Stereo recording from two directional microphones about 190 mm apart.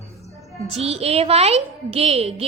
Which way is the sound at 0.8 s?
30° right (ahead or behind).